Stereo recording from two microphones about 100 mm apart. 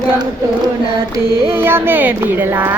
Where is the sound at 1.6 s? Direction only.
20° right (ahead or behind).